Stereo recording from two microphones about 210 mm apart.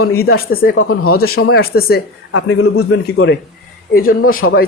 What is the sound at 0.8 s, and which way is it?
Speech, 85° left.